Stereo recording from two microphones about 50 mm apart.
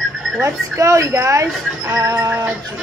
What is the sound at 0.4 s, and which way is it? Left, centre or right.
Speech, right.